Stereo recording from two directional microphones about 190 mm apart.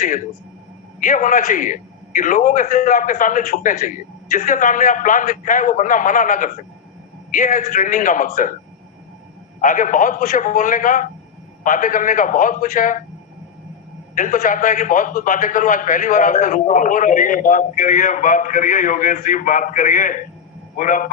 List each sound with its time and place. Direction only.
0.9 s a man's voice: 45° left (ahead or behind)
9.6 s a man's voice: 45° left (ahead or behind)
14.2 s a man's voice: 40° left (ahead or behind)